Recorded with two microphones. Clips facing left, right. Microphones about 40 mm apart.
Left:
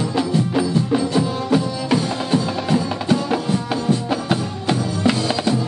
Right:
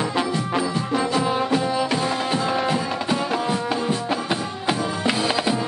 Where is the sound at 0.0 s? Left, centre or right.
Right.